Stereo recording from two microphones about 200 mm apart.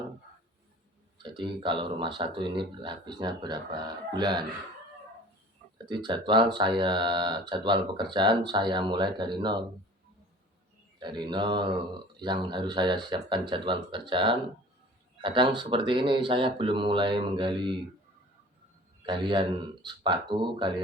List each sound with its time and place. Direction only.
1.2 s speech: 25° right (ahead or behind)
5.7 s speech: 20° right (ahead or behind)
11.0 s speech: 20° right (ahead or behind)
19.0 s speech: 25° right (ahead or behind)